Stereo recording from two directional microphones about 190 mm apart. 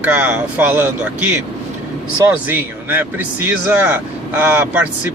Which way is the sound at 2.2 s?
10° right (ahead or behind).